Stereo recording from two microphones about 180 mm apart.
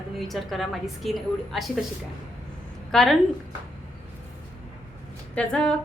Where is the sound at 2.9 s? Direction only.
Centre (ahead or behind).